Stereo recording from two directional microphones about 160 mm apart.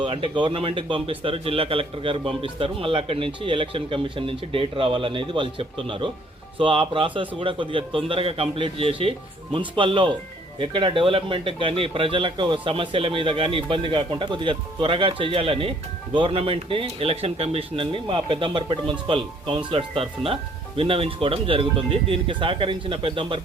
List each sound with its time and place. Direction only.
0.0 s speech: 30° right (ahead or behind)